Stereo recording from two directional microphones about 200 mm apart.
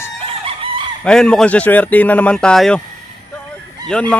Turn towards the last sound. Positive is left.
turn(degrees=5)  # may be behind; listen again after turning